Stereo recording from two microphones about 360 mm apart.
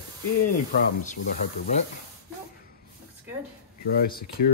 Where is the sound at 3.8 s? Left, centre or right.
Left.